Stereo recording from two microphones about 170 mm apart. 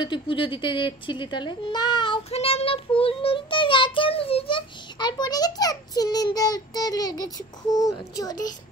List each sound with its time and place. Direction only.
0.0 s a child's voice: 30° left (ahead or behind)